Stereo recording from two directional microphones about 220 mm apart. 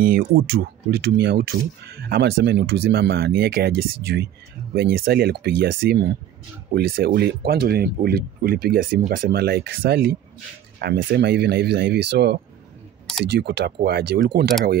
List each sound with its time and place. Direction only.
0.0 s speech: 40° right (ahead or behind)